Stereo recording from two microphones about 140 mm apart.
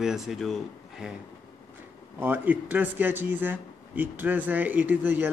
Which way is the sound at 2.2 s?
15° right (ahead or behind).